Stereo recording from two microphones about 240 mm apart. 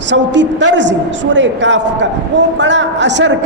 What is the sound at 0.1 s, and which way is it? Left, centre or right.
A man's voice, right.